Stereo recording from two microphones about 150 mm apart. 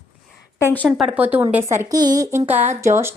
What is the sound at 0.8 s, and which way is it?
Speech, centre (ahead or behind).